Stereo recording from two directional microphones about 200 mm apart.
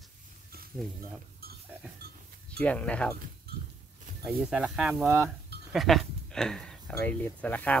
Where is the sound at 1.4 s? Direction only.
50° right (ahead or behind).